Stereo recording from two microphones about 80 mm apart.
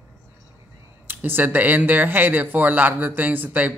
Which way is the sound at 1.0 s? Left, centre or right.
Right.